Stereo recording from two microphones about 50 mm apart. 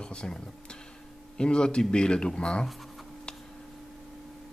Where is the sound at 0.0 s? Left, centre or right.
Centre.